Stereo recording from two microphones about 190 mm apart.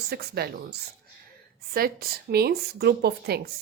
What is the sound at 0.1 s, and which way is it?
A woman's voice, 55° right (ahead or behind).